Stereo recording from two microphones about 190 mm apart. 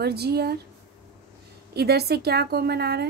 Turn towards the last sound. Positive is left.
turn(degrees=-60)  # may be behind; listen again after turning